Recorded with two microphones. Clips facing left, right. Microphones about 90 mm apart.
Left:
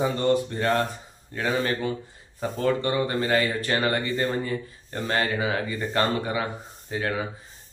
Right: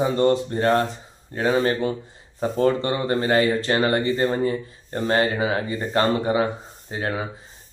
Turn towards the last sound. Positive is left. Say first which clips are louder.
# right 1 dB
turn(degrees=-30)  # may be behind; listen again after turning